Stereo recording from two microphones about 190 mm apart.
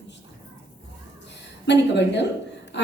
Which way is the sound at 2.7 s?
65° left (ahead or behind).